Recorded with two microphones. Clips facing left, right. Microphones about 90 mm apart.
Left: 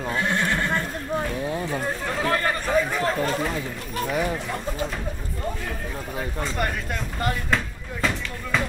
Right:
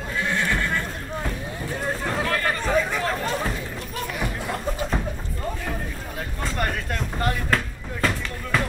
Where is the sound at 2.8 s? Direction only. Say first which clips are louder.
Left 1 dB; 5° left (ahead or behind).